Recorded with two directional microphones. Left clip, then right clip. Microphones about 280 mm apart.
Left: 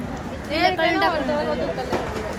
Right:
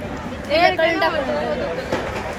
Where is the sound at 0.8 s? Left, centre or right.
Centre.